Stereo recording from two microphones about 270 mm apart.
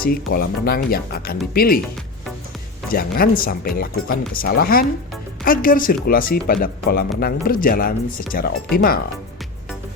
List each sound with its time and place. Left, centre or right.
0.0 s speech: left
2.9 s speech: left